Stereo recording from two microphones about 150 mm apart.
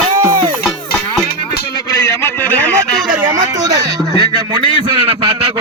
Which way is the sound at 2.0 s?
20° left (ahead or behind).